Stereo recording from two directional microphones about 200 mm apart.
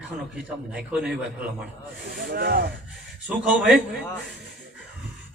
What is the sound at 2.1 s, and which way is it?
Speech, 50° right (ahead or behind).